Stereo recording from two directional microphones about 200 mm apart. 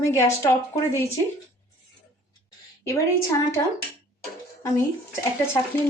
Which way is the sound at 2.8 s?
15° left (ahead or behind).